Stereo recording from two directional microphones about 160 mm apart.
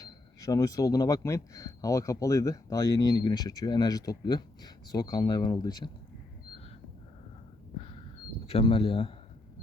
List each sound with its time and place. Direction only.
0.0 s speech: 20° left (ahead or behind)
8.4 s speech: 35° left (ahead or behind)